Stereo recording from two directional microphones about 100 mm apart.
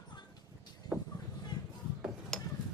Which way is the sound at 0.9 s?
20° right (ahead or behind).